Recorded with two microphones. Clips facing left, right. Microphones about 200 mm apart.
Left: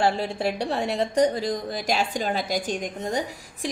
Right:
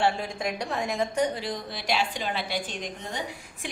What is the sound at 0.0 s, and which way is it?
A woman's voice, 35° left (ahead or behind).